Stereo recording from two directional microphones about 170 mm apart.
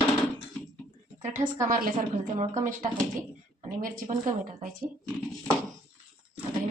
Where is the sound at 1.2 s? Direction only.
45° right (ahead or behind).